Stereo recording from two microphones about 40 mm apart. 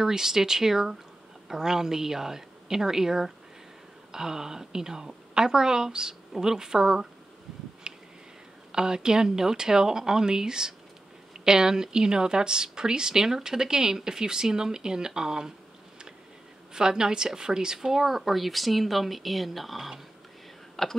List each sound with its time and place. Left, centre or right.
0.0 s a woman's voice: centre
7.8 s a sound: right
8.7 s a woman's voice: centre
16.7 s a woman's voice: centre
17.7 s speech: centre
20.8 s speech: centre